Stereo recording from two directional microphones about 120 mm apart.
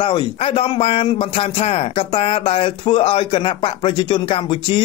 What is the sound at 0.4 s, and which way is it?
Speech, 55° left (ahead or behind).